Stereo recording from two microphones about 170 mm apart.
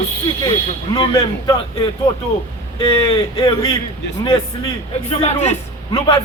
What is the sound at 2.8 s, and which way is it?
Speech, 30° left (ahead or behind).